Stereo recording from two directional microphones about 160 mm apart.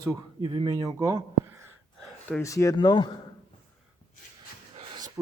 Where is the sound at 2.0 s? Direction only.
10° left (ahead or behind).